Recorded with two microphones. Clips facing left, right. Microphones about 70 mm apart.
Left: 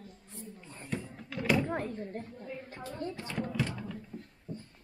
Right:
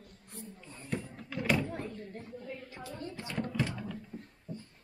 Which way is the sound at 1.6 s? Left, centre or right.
Left.